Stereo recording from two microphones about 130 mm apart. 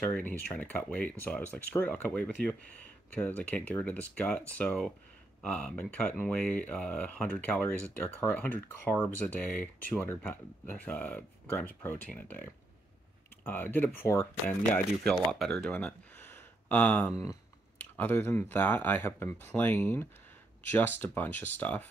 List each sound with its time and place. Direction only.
0.1 s speech: 10° left (ahead or behind)
15.0 s speech: 5° left (ahead or behind)